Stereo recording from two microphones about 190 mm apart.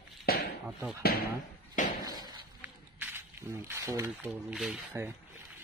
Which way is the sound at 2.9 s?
10° right (ahead or behind).